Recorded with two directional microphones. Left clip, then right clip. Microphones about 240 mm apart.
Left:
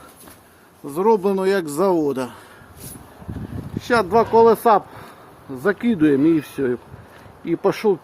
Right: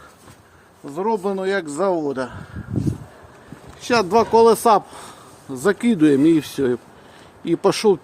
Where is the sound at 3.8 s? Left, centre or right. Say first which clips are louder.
Even; centre.